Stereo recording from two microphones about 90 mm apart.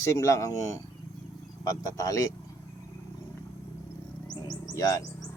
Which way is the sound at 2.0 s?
40° left (ahead or behind).